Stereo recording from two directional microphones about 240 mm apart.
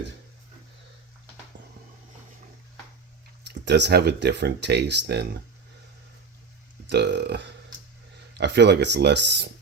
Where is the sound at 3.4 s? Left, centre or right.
Right.